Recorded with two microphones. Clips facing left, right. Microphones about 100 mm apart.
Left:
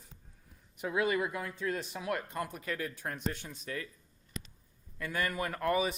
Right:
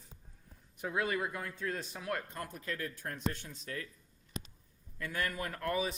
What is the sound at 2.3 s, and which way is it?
Speech, 80° left.